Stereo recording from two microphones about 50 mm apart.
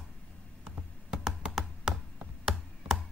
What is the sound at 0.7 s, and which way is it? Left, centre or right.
Computer keyboard, centre.